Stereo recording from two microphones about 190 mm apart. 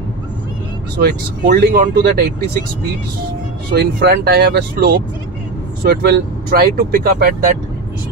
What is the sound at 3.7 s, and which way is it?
Speech, 55° right (ahead or behind).